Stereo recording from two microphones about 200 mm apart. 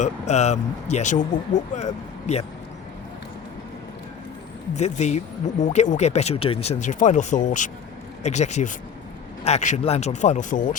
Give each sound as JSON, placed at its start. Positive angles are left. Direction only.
{"t": 0.0, "sound": "speech", "side_deg": 35}
{"t": 4.7, "sound": "speech", "side_deg": 35}